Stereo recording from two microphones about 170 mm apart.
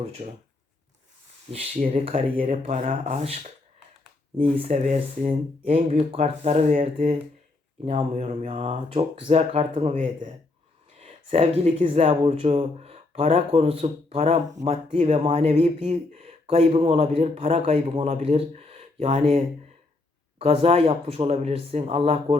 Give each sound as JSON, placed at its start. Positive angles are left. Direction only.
{"t": 1.5, "sound": "speech", "side_deg": -35}
{"t": 20.4, "sound": "speech", "side_deg": -35}